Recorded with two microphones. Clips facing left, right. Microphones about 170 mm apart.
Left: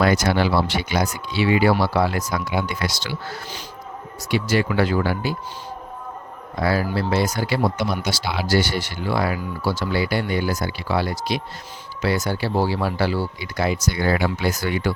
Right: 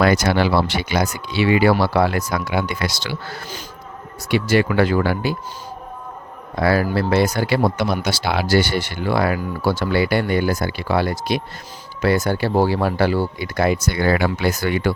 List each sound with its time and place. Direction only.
0.0 s speech: 75° right (ahead or behind)
4.3 s speech: 65° right (ahead or behind)
6.6 s speech: 65° right (ahead or behind)